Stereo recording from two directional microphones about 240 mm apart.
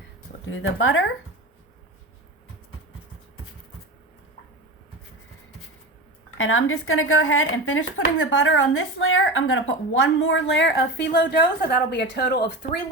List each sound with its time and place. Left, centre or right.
0.4 s speech: left
6.3 s a woman's voice: left